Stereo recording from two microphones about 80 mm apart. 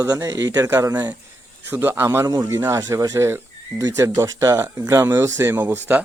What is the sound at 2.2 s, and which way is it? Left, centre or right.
Speech, right.